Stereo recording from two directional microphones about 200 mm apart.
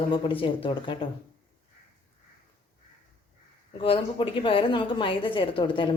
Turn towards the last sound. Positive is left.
turn(degrees=25)  # may be behind; listen again after turning